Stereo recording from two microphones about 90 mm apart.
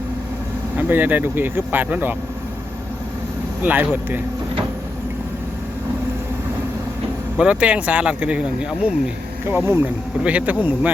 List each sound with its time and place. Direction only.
0.8 s speech: 20° right (ahead or behind)
3.6 s speech: 20° right (ahead or behind)
7.3 s speech: 15° right (ahead or behind)